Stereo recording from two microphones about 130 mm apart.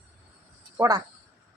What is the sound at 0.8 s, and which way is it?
Speech, 30° right (ahead or behind).